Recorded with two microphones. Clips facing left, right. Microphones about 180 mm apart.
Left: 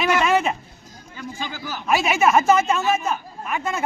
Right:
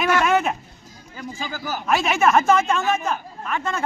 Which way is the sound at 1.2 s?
45° right (ahead or behind).